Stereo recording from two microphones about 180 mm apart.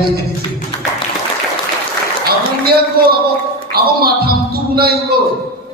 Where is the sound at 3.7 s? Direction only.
60° right (ahead or behind).